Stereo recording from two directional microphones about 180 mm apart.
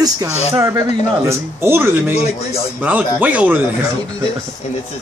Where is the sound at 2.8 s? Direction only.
10° right (ahead or behind).